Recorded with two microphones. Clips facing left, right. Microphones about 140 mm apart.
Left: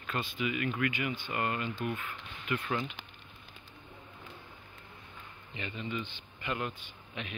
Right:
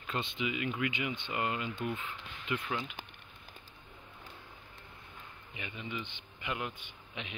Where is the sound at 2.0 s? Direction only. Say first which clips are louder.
Left 1 dB; 25° right (ahead or behind).